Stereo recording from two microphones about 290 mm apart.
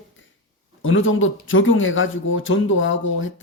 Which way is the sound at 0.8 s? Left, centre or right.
Left.